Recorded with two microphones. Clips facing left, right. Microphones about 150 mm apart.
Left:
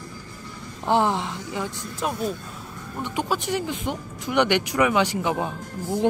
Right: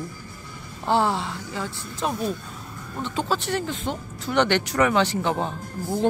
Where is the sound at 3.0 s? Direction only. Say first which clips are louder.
Even; 15° left (ahead or behind).